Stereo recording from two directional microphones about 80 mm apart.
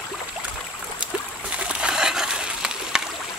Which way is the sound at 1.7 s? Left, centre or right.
Centre.